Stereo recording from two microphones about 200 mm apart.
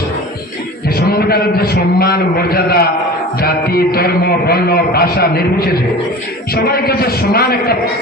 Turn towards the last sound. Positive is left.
turn(degrees=50)  # may be behind; listen again after turning